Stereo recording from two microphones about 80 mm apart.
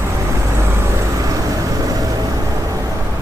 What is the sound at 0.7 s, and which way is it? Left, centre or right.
Vehicle, right.